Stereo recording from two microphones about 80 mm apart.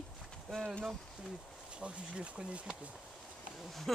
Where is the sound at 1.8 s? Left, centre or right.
Centre.